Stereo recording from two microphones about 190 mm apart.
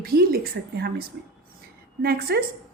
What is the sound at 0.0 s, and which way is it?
A woman's voice, 50° right (ahead or behind).